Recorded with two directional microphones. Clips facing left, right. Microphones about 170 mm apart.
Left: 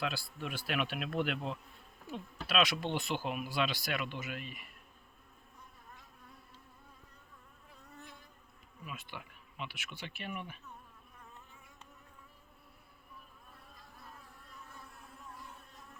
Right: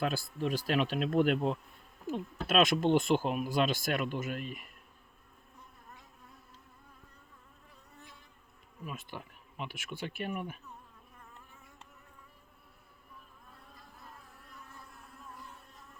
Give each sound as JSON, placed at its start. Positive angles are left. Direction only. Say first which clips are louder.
{"t": 0.0, "sound": "speech", "louder": "right 6 dB", "side_deg": -45}
{"t": 8.8, "sound": "speech", "louder": "right 4 dB", "side_deg": -40}